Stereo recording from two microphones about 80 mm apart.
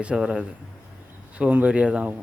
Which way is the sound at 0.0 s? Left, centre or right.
Centre.